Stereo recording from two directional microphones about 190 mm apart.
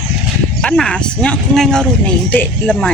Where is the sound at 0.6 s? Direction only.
5° left (ahead or behind).